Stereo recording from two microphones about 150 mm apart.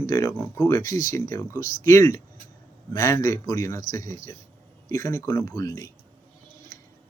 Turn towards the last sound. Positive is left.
turn(degrees=20)  # may be behind; listen again after turning